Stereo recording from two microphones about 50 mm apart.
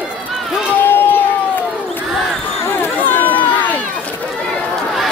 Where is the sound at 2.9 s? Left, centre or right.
Left.